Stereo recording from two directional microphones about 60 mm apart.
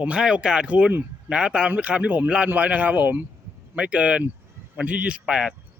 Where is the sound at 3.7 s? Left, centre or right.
Centre.